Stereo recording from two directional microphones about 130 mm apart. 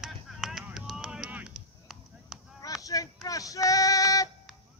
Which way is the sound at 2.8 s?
25° left (ahead or behind).